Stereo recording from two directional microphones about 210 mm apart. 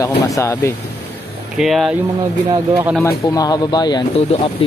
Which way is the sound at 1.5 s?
Centre (ahead or behind).